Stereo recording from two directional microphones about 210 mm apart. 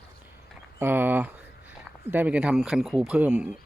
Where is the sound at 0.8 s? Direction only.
10° right (ahead or behind).